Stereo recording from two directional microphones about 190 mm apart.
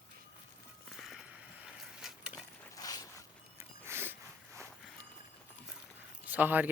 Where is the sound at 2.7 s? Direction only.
20° left (ahead or behind).